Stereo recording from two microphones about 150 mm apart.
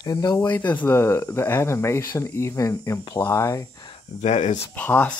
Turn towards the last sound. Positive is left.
turn(degrees=10)  # may be behind; listen again after turning